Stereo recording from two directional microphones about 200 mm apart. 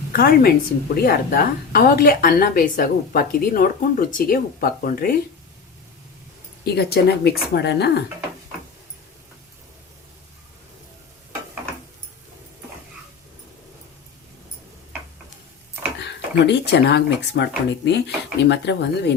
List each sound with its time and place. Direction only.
0.1 s a woman's voice: 50° left (ahead or behind)
6.7 s speech: 55° left (ahead or behind)
16.0 s speech: 60° left (ahead or behind)